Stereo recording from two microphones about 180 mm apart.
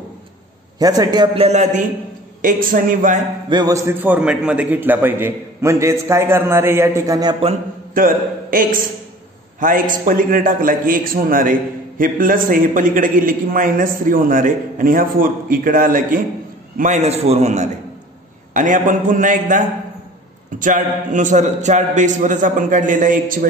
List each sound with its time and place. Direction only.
0.7 s a man's voice: 20° right (ahead or behind); by 3.3 s 45° right (ahead or behind)
3.4 s a man's voice: 20° right (ahead or behind)
7.9 s a man's voice: 50° right (ahead or behind)